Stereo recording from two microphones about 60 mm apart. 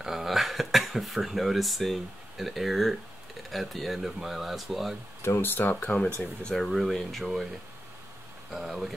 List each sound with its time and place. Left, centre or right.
0.0 s speech: centre
5.2 s speech: left
6.4 s speech: centre
8.5 s speech: centre